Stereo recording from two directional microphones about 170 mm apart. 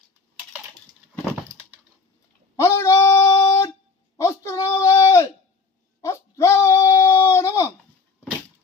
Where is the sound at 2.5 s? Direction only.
15° left (ahead or behind).